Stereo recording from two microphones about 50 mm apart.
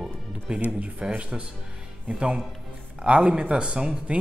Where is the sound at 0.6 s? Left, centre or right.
Right.